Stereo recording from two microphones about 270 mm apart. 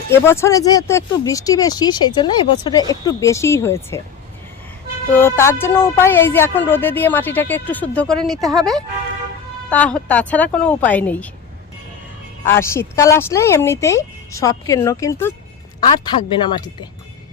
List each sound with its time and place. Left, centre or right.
0.1 s speech: centre
5.1 s speech: centre
12.5 s speech: centre